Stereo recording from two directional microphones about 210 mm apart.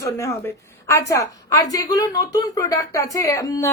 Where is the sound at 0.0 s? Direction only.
15° left (ahead or behind).